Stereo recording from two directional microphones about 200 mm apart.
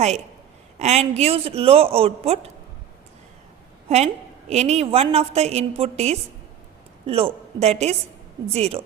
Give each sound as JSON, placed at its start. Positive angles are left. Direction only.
{"t": 0.8, "sound": "a woman's voice", "side_deg": -35}
{"t": 3.8, "sound": "a woman's voice", "side_deg": -35}